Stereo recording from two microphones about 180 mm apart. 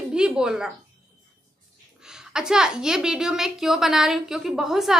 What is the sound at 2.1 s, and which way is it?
A child's voice, 5° right (ahead or behind).